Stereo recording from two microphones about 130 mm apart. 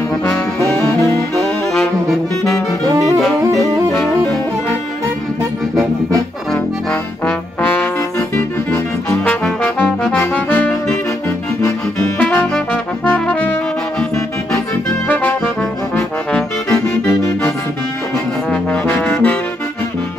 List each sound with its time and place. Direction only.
1.4 s saxophone: centre (ahead or behind)
8.4 s music: 20° left (ahead or behind)
9.3 s music: 10° left (ahead or behind)
12.2 s music: 15° left (ahead or behind)
13.0 s brass instrument: 15° left (ahead or behind)
16.6 s music: 25° left (ahead or behind)
18.5 s brass instrument: 15° left (ahead or behind)